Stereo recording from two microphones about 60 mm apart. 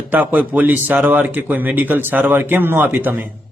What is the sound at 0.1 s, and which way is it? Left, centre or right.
Speech, right.